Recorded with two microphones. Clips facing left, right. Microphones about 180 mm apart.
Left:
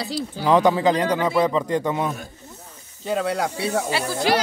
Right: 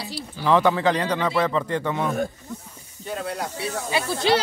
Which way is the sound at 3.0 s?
90° left.